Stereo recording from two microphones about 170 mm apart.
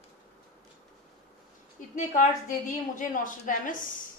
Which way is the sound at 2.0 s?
50° left (ahead or behind).